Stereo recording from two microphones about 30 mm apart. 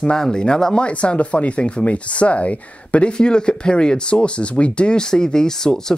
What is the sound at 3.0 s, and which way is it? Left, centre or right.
Speech, left.